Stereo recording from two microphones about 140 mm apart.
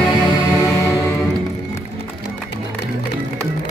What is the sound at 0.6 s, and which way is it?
Music, 20° left (ahead or behind).